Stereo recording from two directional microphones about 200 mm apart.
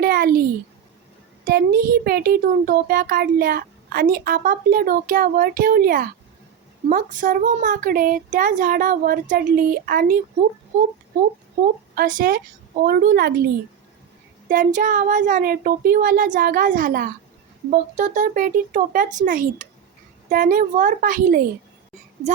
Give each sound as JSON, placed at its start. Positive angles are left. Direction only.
{"t": 0.0, "sound": "a sound", "side_deg": -50}
{"t": 1.5, "sound": "a child's voice", "side_deg": -45}
{"t": 11.6, "sound": "a child's voice", "side_deg": -45}
{"t": 14.5, "sound": "a child's voice", "side_deg": -40}